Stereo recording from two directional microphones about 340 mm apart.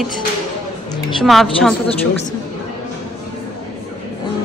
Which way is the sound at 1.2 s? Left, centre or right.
Centre.